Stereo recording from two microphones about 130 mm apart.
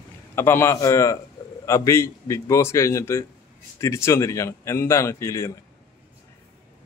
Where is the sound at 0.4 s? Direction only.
15° left (ahead or behind).